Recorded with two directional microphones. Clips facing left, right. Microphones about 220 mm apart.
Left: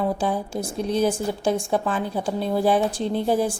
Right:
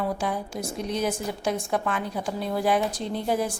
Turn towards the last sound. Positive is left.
turn(degrees=30)  # may be behind; listen again after turning